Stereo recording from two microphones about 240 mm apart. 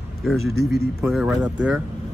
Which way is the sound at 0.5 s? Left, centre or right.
Right.